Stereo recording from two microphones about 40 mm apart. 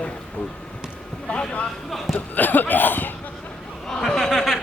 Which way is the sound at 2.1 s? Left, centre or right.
Left.